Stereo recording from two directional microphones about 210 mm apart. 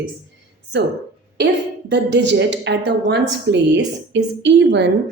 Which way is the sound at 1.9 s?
55° right (ahead or behind).